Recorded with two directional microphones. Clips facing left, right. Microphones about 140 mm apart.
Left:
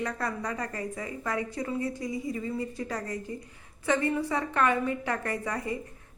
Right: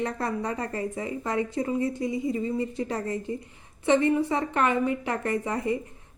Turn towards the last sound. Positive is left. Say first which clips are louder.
# right 5 dB
turn(degrees=-25)  # may be behind; listen again after turning